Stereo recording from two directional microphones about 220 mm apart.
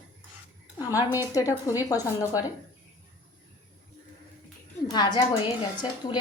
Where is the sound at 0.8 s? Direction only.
15° left (ahead or behind).